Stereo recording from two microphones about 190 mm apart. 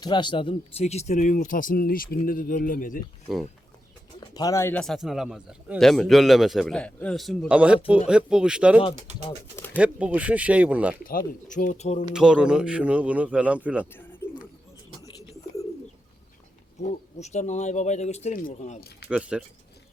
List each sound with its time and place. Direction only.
0.0 s speech: 25° left (ahead or behind); by 3.0 s 45° left (ahead or behind)
4.2 s speech: 20° left (ahead or behind); by 10.9 s 5° right (ahead or behind)
11.4 s speech: 40° left (ahead or behind)
12.1 s speech: 5° right (ahead or behind)
14.2 s bird: 15° left (ahead or behind)
16.8 s speech: 35° left (ahead or behind)
19.0 s speech: 5° right (ahead or behind)